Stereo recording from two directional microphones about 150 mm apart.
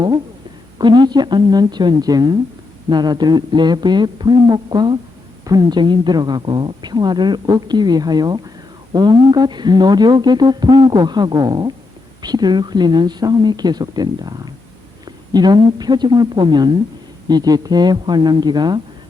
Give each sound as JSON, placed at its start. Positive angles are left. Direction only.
{"t": 0.8, "sound": "a woman's voice", "side_deg": -30}